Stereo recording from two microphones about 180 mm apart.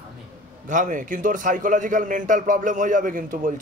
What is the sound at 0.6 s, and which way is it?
A man's voice, 45° right (ahead or behind).